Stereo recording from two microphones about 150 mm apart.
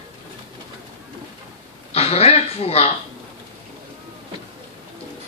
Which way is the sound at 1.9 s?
45° left (ahead or behind).